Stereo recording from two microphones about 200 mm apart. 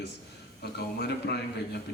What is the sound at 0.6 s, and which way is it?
A man's voice, 55° left (ahead or behind).